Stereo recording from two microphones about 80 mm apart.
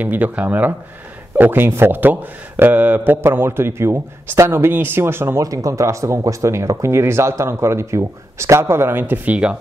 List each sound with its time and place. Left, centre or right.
0.0 s a man's voice: right
5.4 s speech: right; by 9.6 s centre